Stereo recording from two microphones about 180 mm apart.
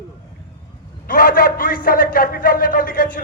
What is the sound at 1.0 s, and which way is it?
A man's voice, 50° left (ahead or behind).